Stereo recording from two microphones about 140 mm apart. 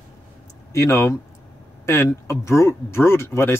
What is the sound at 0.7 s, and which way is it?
Speech, 20° left (ahead or behind).